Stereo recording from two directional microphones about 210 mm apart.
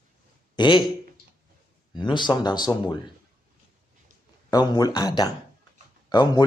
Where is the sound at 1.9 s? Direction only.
20° left (ahead or behind).